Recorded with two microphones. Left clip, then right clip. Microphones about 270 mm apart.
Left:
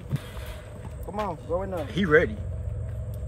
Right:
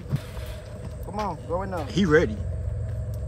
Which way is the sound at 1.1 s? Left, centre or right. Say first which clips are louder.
Even; centre.